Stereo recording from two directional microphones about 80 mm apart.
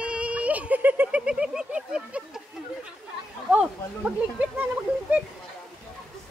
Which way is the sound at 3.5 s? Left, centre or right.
Centre.